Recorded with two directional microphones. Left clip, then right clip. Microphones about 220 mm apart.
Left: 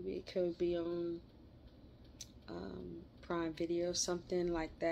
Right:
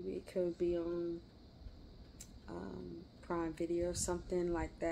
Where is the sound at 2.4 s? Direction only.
Centre (ahead or behind).